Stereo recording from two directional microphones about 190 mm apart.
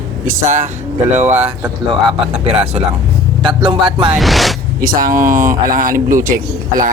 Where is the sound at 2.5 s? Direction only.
35° right (ahead or behind).